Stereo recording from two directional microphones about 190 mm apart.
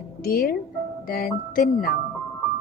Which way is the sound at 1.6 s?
50° left (ahead or behind).